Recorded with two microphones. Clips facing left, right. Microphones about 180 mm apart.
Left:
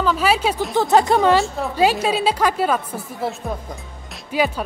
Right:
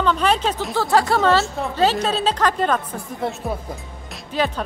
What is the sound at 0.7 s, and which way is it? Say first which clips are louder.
A woman's voice: left 3 dB; 20° left (ahead or behind).